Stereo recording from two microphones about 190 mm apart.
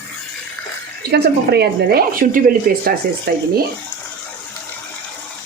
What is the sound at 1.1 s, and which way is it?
Speech, 60° right (ahead or behind).